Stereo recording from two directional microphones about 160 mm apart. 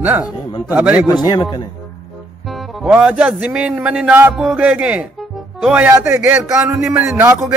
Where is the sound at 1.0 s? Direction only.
25° left (ahead or behind).